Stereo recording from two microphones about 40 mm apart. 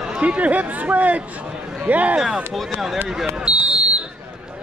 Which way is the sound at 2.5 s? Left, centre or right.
Centre.